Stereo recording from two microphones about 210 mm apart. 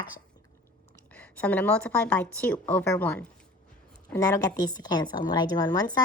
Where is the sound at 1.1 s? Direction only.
5° left (ahead or behind).